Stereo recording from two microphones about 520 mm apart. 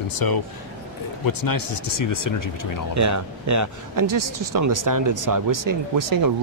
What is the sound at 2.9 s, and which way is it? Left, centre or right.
Speech, right.